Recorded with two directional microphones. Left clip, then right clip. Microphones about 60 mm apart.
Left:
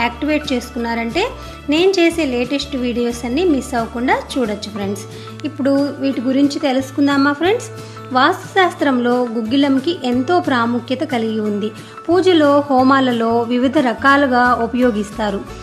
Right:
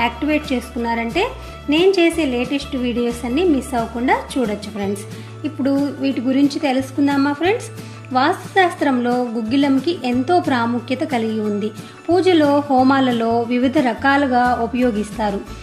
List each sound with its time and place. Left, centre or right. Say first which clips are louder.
0.0 s speech: left 1 dB; centre
5.6 s speech: left 3 dB; centre
7.2 s speech: left 4 dB; left
8.1 s speech: left 3 dB; left
12.1 s speech: left 2 dB; left
12.9 s speech: left 3 dB; centre
13.2 s speech: left 2 dB; left
14.3 s speech: left 2 dB; left
15.2 s speech: even; left